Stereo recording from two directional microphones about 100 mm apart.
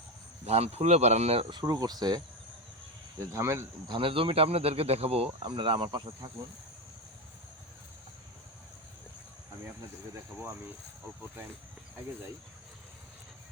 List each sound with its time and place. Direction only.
0.4 s speech: 90° right
1.6 s speech: 40° right (ahead or behind)
3.2 s speech: 30° right (ahead or behind)
3.8 s speech: 55° right (ahead or behind); by 5.3 s 85° right
5.4 s speech: 55° right (ahead or behind)